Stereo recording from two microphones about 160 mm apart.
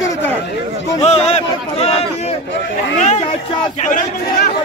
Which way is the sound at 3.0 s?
45° left (ahead or behind).